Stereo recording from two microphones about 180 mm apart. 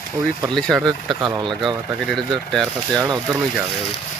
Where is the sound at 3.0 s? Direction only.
20° right (ahead or behind).